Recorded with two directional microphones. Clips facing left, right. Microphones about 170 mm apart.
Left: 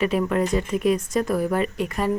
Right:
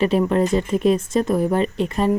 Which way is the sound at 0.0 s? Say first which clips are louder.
Right 4 dB; 30° right (ahead or behind).